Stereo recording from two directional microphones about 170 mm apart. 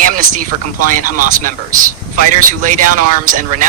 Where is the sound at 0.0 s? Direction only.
50° right (ahead or behind).